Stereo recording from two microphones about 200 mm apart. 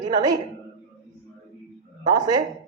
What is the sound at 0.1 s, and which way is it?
Speech, 20° right (ahead or behind).